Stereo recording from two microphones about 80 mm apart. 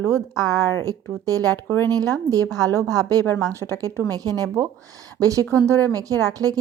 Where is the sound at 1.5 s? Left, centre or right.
Left.